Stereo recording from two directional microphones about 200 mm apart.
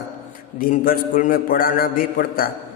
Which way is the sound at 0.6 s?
45° left (ahead or behind).